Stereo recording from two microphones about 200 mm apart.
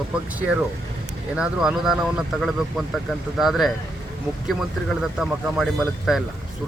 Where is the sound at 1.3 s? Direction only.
5° right (ahead or behind).